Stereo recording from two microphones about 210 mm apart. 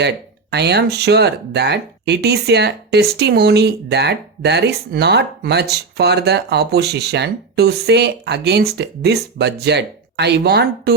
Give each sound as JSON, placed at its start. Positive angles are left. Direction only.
{"t": 0.5, "sound": "speech", "side_deg": -50}